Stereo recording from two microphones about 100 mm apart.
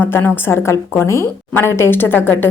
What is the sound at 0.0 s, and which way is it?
A woman's voice, 20° left (ahead or behind).